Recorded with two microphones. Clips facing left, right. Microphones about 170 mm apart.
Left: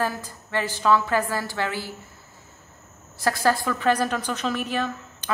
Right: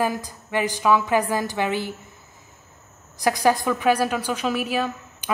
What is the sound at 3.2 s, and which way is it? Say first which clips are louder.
A man's voice: right 2 dB; 15° right (ahead or behind).